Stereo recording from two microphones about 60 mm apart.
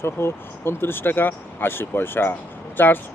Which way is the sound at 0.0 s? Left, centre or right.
Left.